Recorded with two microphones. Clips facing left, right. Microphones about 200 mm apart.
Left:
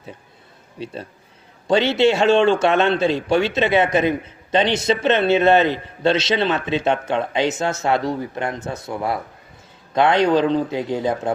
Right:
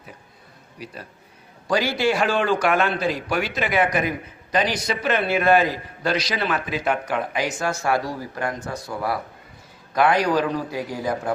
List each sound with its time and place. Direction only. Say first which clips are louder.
0.8 s a man's voice: left 7 dB; 25° left (ahead or behind)